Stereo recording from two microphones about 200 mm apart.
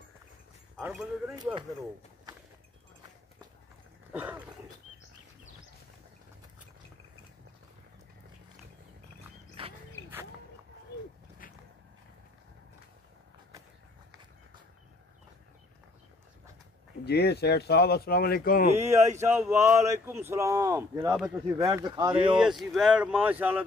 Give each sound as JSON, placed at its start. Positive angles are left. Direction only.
{"t": 0.7, "sound": "speech", "side_deg": -5}
{"t": 4.1, "sound": "a sound", "side_deg": -10}
{"t": 9.6, "sound": "a sound", "side_deg": -25}
{"t": 17.0, "sound": "speech", "side_deg": 55}
{"t": 18.7, "sound": "speech", "side_deg": -15}
{"t": 22.4, "sound": "speech", "side_deg": 0}